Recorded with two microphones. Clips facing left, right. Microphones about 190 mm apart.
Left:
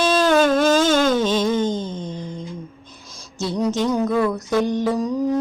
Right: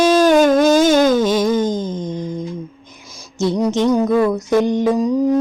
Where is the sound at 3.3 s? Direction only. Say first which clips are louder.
Right 5 dB; 15° right (ahead or behind).